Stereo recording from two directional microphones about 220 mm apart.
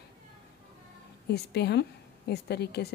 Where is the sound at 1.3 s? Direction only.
50° left (ahead or behind).